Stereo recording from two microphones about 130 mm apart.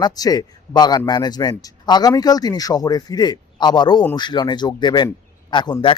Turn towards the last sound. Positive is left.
turn(degrees=40)  # may be behind; listen again after turning